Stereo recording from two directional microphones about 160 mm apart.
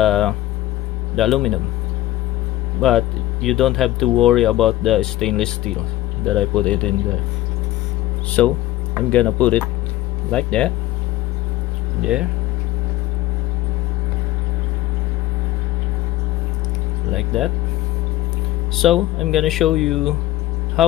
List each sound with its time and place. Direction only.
0.0 s speech: 5° left (ahead or behind)
2.8 s speech: centre (ahead or behind)
8.4 s speech: 10° left (ahead or behind)
12.0 s speech: 5° right (ahead or behind)
17.1 s speech: centre (ahead or behind)
18.8 s speech: centre (ahead or behind)